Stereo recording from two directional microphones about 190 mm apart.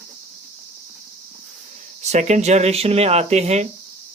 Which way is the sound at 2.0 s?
35° right (ahead or behind).